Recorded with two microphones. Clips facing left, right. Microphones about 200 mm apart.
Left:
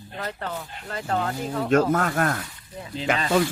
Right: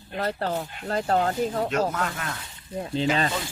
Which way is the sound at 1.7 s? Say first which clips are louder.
Left 6 dB; 50° left (ahead or behind).